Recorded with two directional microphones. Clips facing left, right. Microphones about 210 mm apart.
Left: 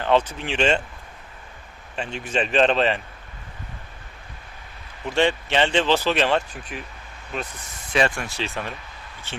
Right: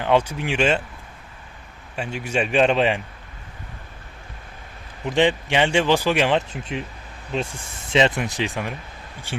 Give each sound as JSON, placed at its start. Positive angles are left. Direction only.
{"t": 0.0, "sound": "speech", "side_deg": -10}
{"t": 2.0, "sound": "speech", "side_deg": -10}
{"t": 5.0, "sound": "speech", "side_deg": -15}